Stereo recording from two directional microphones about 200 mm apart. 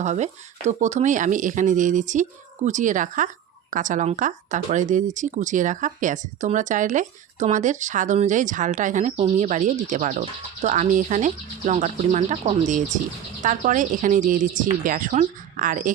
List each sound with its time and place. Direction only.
0.0 s speech: 35° right (ahead or behind)